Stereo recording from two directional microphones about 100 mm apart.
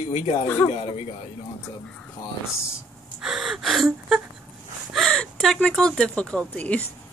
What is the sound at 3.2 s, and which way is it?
Speech, 5° right (ahead or behind).